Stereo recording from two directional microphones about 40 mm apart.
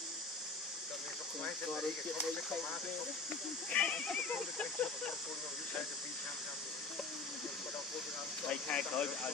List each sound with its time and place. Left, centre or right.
3.7 s speech: left
8.5 s speech: left